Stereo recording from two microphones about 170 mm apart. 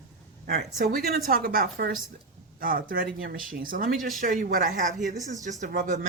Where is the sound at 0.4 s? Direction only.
60° right (ahead or behind).